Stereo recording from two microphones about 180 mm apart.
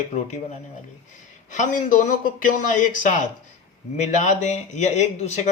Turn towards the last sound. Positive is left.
turn(degrees=40)  # may be behind; listen again after turning